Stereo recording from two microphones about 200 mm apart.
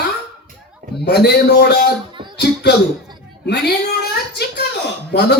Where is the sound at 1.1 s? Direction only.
55° left (ahead or behind).